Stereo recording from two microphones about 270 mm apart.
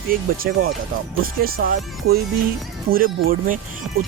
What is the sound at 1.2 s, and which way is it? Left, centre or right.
Speech, right.